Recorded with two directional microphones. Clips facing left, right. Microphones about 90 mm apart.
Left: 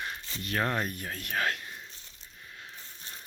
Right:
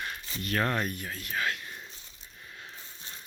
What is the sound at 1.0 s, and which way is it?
Speech, 45° left (ahead or behind).